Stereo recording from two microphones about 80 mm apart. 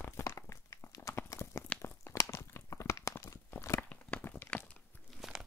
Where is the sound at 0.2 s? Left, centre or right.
Left.